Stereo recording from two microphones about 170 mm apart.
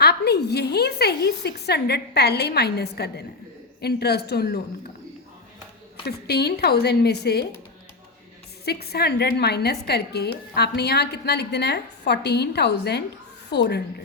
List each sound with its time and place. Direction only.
0.0 s a woman's voice: 70° left (ahead or behind)
6.1 s a woman's voice: 70° left (ahead or behind)
8.6 s a woman's voice: 65° left (ahead or behind)